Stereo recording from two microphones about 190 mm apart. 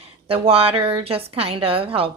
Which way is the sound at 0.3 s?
30° right (ahead or behind).